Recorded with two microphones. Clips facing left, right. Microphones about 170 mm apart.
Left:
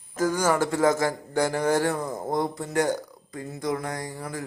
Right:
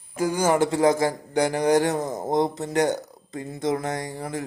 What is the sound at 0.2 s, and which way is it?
A man's voice, 15° right (ahead or behind).